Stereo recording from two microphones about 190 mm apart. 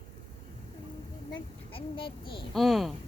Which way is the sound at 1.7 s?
25° left (ahead or behind).